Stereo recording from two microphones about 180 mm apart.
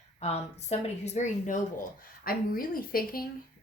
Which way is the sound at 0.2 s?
35° left (ahead or behind).